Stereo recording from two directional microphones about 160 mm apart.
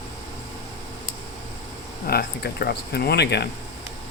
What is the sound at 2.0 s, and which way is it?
Speech, 80° left.